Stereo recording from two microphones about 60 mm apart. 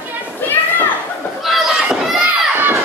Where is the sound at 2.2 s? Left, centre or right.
Right.